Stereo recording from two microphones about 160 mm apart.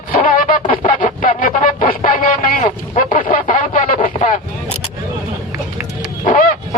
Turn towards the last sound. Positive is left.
turn(degrees=55)  # may be behind; listen again after turning